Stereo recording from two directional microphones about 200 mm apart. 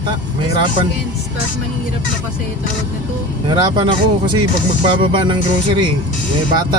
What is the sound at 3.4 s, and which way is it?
Speech, 20° right (ahead or behind).